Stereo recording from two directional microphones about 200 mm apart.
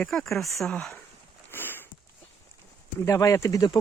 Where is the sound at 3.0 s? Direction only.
15° left (ahead or behind).